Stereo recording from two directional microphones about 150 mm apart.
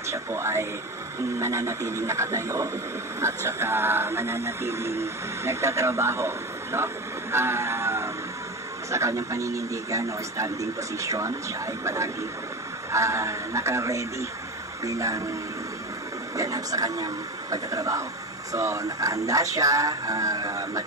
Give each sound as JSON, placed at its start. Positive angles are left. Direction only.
{"t": 0.0, "sound": "speech", "side_deg": -20}
{"t": 3.2, "sound": "music", "side_deg": -20}
{"t": 8.9, "sound": "speech", "side_deg": -20}
{"t": 16.3, "sound": "speech", "side_deg": -25}